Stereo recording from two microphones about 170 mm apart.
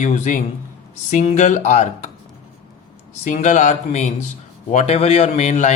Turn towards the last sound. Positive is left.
turn(degrees=45)  # may be behind; listen again after turning